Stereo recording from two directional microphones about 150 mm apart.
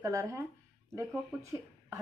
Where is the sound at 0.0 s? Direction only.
20° right (ahead or behind).